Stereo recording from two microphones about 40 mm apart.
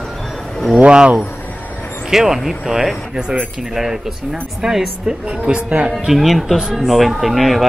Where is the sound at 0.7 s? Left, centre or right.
Right.